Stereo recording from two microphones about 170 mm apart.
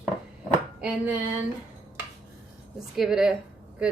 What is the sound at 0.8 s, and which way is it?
Speech, 10° right (ahead or behind).